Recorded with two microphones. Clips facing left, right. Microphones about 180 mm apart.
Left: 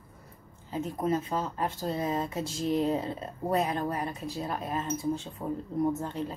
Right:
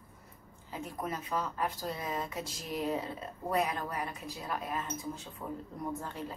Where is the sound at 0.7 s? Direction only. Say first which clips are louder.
Left 9 dB; 25° left (ahead or behind).